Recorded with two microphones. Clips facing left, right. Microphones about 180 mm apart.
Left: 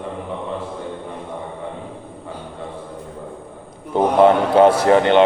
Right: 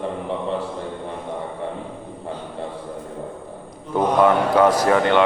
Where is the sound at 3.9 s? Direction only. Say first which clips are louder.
Left 3 dB; 25° left (ahead or behind).